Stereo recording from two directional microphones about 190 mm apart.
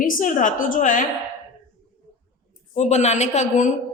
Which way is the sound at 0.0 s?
45° left (ahead or behind).